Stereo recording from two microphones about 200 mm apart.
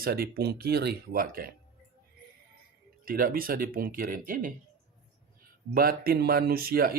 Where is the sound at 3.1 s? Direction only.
45° right (ahead or behind).